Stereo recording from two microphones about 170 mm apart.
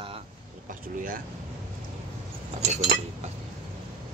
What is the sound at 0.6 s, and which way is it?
Speech, 55° right (ahead or behind).